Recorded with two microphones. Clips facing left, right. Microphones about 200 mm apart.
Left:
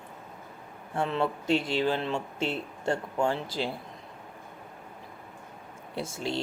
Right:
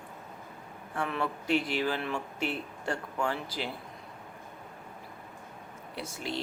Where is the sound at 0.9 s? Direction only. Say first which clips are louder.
Left 4 dB; 25° left (ahead or behind).